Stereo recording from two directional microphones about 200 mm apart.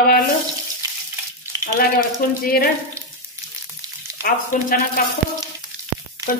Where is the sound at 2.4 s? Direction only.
45° left (ahead or behind).